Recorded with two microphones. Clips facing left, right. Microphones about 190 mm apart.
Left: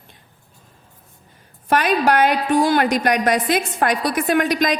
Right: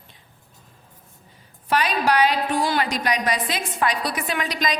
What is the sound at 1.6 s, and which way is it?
A woman's voice, 50° left (ahead or behind).